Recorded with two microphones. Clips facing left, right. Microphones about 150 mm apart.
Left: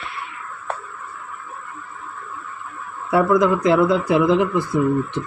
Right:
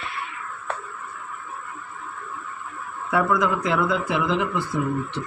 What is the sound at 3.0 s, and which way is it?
Speech, 35° left (ahead or behind).